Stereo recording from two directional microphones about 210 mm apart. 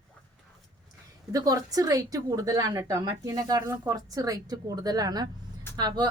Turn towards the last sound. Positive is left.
turn(degrees=-20)  # may be behind; listen again after turning